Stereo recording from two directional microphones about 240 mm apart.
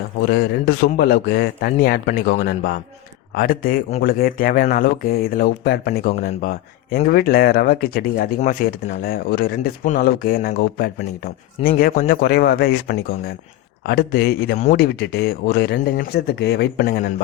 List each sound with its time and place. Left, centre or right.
0.3 s speech: left